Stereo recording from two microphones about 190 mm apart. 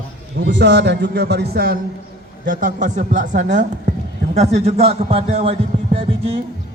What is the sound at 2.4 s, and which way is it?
Speech, 45° right (ahead or behind).